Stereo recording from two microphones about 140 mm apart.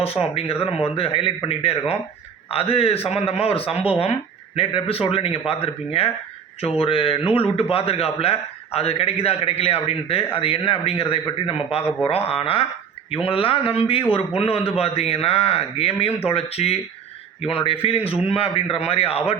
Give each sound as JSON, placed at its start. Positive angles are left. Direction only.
{"t": 0.0, "sound": "speech", "side_deg": 45}